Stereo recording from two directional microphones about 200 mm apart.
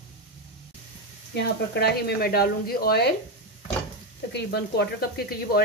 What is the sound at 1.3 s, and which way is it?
Speech, 55° left (ahead or behind).